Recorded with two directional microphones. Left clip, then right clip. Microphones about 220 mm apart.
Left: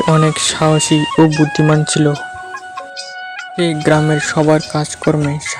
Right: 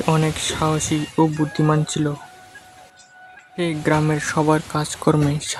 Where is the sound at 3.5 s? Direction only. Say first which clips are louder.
Left 7 dB; 20° left (ahead or behind).